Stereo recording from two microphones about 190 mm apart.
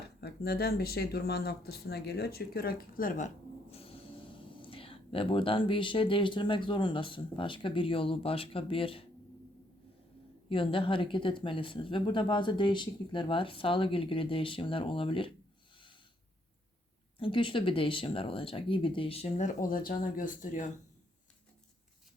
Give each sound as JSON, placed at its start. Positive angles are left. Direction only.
{"t": 0.0, "sound": "speech", "side_deg": 60}
{"t": 3.7, "sound": "a sound", "side_deg": 30}
{"t": 4.6, "sound": "speech", "side_deg": 30}
{"t": 10.5, "sound": "speech", "side_deg": 25}
{"t": 17.2, "sound": "speech", "side_deg": 25}